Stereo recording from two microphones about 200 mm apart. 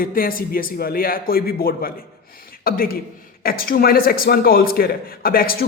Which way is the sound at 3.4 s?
45° left (ahead or behind).